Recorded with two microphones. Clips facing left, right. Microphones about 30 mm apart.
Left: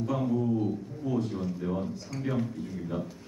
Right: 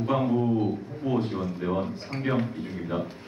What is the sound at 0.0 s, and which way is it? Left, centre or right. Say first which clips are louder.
A man's voice: right 4 dB; right.